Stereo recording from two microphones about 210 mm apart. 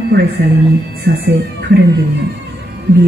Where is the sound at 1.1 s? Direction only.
55° right (ahead or behind).